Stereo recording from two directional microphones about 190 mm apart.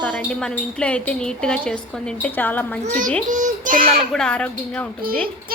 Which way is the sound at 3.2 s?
45° right (ahead or behind).